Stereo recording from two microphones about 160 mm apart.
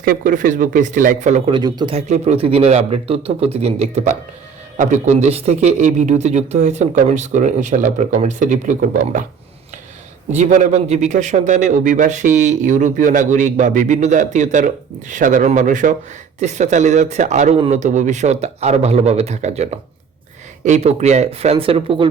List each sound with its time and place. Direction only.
0.0 s speech: 60° right (ahead or behind)
1.5 s speech: 25° right (ahead or behind)
2.0 s a man's voice: 45° right (ahead or behind)
10.3 s a man's voice: 50° right (ahead or behind); by 22.1 s 35° right (ahead or behind)